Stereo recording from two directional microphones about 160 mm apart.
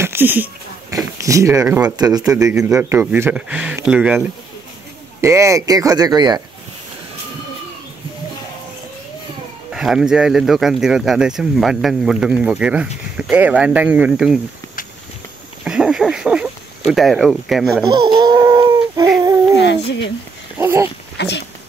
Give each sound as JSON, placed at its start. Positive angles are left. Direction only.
{"t": 0.0, "sound": "a sound", "side_deg": -15}
{"t": 1.2, "sound": "speech", "side_deg": -20}
{"t": 2.6, "sound": "speech", "side_deg": -15}
{"t": 5.2, "sound": "speech", "side_deg": -20}
{"t": 9.7, "sound": "speech", "side_deg": -5}
{"t": 15.6, "sound": "a sound", "side_deg": -5}
{"t": 17.8, "sound": "a sound", "side_deg": -30}
{"t": 20.5, "sound": "speech", "side_deg": -15}
{"t": 21.2, "sound": "speech", "side_deg": 90}